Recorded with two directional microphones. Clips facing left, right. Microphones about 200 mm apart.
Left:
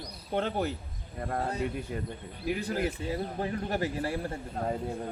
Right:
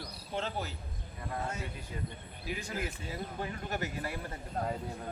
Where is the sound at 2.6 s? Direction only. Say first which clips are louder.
Left 8 dB; 35° left (ahead or behind).